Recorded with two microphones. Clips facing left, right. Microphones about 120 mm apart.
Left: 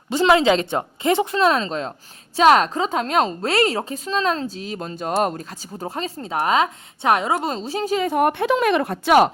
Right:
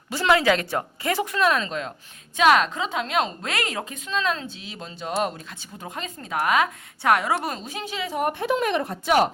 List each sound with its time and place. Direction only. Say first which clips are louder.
0.1 s a woman's voice: left 4 dB; 20° left (ahead or behind); by 9.3 s 70° left (ahead or behind)